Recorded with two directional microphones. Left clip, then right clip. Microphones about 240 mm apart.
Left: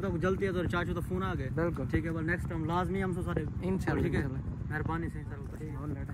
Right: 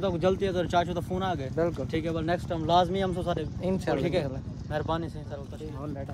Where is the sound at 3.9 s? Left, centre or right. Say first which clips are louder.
Right 5 dB; right.